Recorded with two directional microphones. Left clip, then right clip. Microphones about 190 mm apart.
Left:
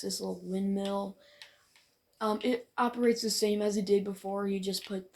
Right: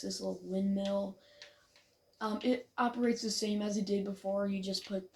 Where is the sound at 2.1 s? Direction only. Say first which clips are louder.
Left 4 dB; 40° left (ahead or behind).